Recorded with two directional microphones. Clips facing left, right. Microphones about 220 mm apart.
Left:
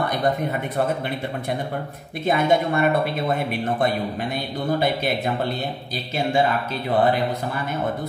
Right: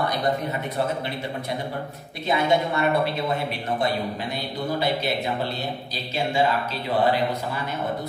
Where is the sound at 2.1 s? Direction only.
50° left (ahead or behind).